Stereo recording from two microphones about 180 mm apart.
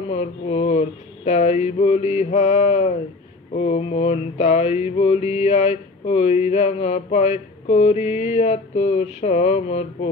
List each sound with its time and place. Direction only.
0.1 s music: 35° left (ahead or behind)